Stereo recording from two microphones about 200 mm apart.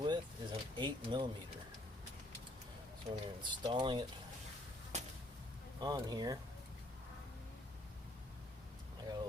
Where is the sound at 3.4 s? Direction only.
20° right (ahead or behind).